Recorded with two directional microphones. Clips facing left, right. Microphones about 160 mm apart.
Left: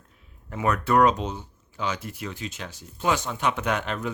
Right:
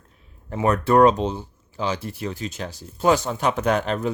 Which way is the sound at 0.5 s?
30° right (ahead or behind).